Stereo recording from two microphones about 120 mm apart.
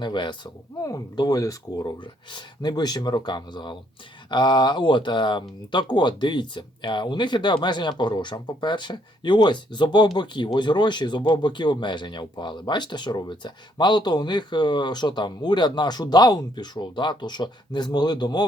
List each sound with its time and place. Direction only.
0.0 s speech: 40° left (ahead or behind)
0.8 s speech: 30° left (ahead or behind)